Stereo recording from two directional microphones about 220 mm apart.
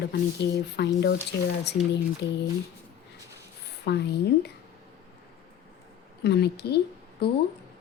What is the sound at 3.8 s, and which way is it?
Speech, 50° left (ahead or behind).